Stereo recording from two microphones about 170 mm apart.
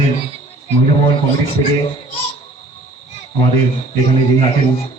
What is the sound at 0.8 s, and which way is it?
Speech, 35° left (ahead or behind).